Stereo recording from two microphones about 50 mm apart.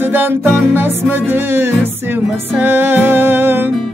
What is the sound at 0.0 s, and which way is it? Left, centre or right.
Music, right.